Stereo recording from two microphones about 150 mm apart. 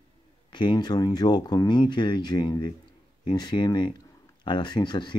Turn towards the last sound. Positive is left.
turn(degrees=30)  # may be behind; listen again after turning